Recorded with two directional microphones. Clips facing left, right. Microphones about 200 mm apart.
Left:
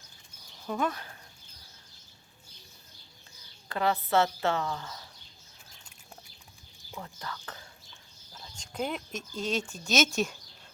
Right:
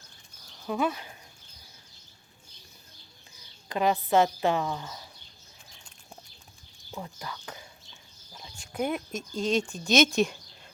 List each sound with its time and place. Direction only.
0.7 s a woman's voice: 10° right (ahead or behind)
3.7 s a woman's voice: 15° right (ahead or behind)
6.9 s a woman's voice: 15° right (ahead or behind)
8.3 s a sound: 10° right (ahead or behind)
9.3 s speech: 5° left (ahead or behind)